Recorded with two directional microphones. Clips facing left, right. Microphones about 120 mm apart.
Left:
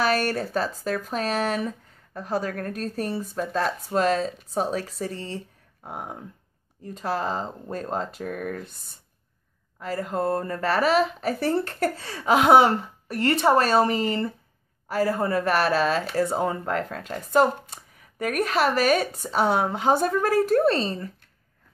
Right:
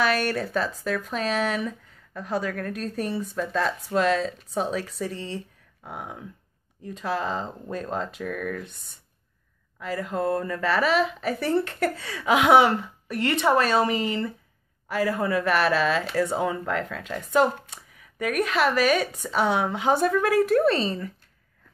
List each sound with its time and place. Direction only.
0.0 s speech: 40° left (ahead or behind)
9.8 s speech: 40° left (ahead or behind)